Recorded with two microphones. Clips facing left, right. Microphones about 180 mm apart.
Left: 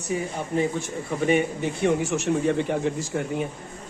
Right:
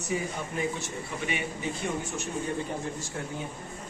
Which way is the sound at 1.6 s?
65° left (ahead or behind).